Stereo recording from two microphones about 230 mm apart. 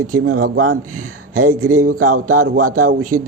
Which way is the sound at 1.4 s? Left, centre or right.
Right.